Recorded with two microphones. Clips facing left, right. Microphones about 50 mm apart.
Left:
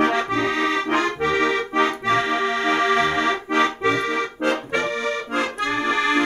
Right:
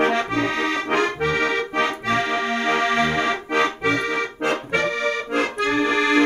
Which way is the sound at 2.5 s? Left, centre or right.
Right.